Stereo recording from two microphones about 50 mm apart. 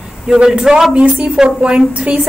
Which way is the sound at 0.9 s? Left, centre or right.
Right.